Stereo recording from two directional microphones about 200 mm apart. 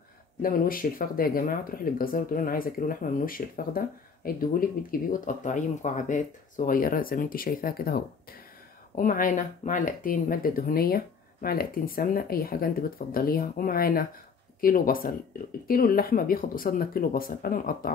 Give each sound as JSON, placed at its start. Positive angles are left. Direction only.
{"t": 0.4, "sound": "speech", "side_deg": 45}